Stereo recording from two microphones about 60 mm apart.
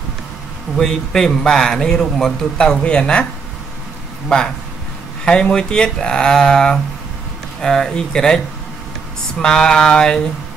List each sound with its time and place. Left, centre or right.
0.7 s speech: centre
5.2 s speech: centre
9.4 s speech: centre